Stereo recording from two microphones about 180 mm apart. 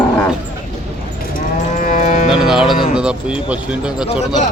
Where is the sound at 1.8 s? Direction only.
45° left (ahead or behind).